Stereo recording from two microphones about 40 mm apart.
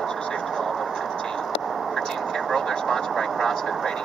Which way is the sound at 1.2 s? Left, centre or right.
Centre.